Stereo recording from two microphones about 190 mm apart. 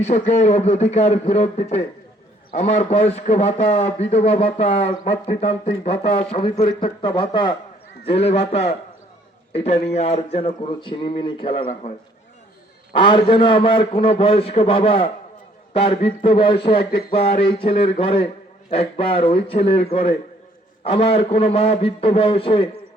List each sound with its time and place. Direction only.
0.0 s a man's voice: 35° left (ahead or behind)
12.9 s a man's voice: 25° left (ahead or behind)